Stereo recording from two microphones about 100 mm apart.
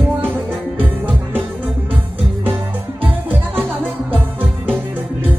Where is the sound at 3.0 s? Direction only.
20° right (ahead or behind).